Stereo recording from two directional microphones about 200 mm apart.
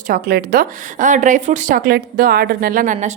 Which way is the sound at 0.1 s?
45° right (ahead or behind).